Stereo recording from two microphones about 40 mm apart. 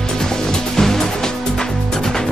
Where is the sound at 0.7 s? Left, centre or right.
Centre.